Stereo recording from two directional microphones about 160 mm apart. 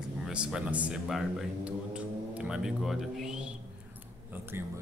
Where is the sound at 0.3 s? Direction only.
5° right (ahead or behind).